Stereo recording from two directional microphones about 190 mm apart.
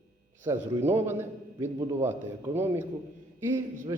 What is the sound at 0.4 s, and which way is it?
A man's voice, 15° right (ahead or behind).